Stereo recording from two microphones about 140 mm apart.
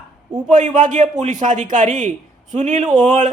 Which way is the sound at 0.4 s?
65° right (ahead or behind).